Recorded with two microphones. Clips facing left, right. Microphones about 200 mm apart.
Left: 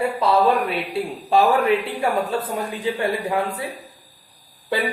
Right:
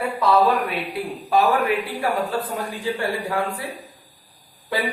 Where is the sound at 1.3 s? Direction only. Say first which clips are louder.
Left 2 dB; 25° left (ahead or behind).